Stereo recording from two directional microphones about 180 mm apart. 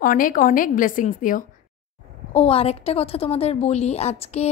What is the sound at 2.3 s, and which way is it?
A woman's voice, 30° left (ahead or behind).